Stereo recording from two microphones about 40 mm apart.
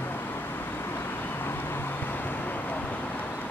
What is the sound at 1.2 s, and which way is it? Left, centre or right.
Vehicle, left.